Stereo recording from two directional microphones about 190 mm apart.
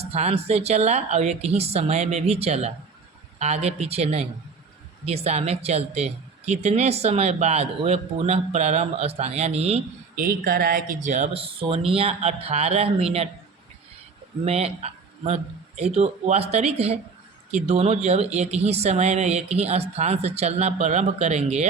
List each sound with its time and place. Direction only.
0.0 s speech: 35° right (ahead or behind)
10.2 s speech: 50° right (ahead or behind); by 13.2 s 30° right (ahead or behind)
14.4 s a man's voice: 35° right (ahead or behind)